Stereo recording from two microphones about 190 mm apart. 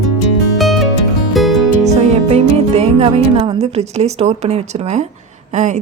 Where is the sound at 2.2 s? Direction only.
35° right (ahead or behind).